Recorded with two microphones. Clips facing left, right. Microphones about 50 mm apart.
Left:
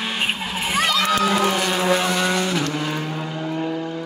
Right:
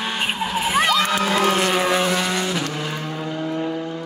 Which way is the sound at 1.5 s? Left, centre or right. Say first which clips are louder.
Right 2 dB; right.